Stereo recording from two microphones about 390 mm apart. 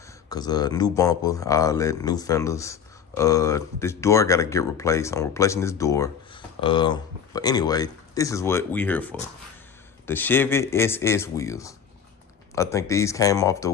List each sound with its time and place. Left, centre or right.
0.3 s speech: centre